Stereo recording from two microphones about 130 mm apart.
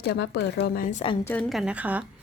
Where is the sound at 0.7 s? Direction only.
90° left.